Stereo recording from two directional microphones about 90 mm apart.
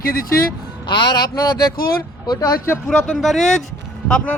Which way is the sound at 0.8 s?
55° left (ahead or behind).